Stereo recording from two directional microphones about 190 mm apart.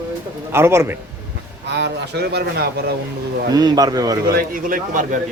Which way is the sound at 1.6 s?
65° right (ahead or behind).